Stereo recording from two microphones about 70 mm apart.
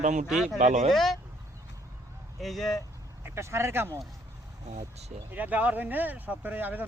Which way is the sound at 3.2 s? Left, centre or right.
Right.